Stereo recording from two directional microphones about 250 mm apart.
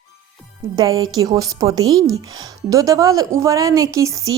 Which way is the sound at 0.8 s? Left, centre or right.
Centre.